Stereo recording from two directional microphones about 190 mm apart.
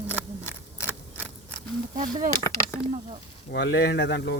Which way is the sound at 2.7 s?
15° left (ahead or behind).